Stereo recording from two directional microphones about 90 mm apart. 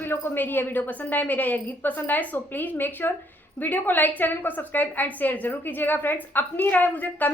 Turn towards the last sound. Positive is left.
turn(degrees=20)  # may be behind; listen again after turning